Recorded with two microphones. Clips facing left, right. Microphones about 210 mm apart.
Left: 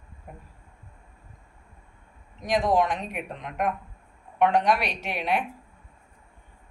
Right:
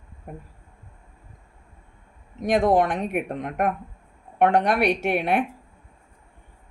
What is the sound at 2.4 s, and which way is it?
Speech, 55° right (ahead or behind).